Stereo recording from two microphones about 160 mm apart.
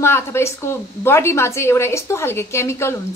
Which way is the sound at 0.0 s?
15° left (ahead or behind).